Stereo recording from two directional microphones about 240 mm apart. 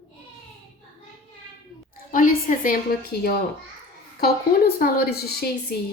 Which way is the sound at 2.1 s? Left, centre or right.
Left.